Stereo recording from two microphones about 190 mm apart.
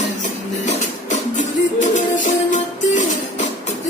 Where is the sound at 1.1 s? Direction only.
40° left (ahead or behind).